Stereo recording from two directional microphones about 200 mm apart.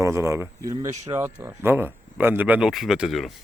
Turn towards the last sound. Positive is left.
turn(degrees=0)  # may be behind; listen again after turning